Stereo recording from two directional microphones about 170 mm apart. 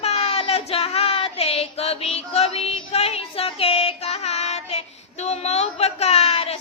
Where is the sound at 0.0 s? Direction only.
35° left (ahead or behind).